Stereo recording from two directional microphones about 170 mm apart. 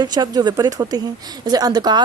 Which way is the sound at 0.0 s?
25° right (ahead or behind).